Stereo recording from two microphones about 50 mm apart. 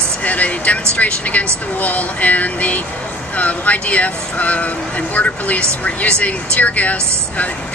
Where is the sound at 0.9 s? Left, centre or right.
Left.